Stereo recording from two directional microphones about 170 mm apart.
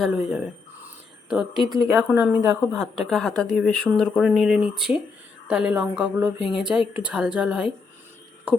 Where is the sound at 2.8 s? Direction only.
5° left (ahead or behind).